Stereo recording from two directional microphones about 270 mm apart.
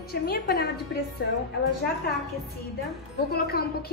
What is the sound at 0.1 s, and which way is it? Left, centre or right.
Speech, left.